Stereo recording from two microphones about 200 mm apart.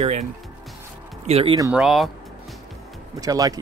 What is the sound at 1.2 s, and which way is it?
Speech, 25° right (ahead or behind).